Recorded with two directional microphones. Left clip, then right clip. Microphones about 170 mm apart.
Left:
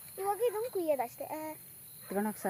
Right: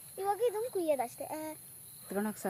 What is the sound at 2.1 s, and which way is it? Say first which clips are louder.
Speech: left 2 dB; 15° left (ahead or behind).